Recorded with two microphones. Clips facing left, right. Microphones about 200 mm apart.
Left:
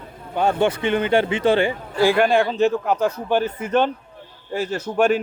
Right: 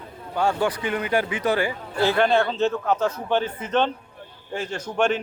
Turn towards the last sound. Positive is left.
turn(degrees=5)  # may be behind; listen again after turning